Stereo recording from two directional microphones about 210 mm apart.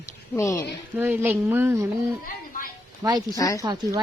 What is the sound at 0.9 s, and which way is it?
Speech, 10° right (ahead or behind).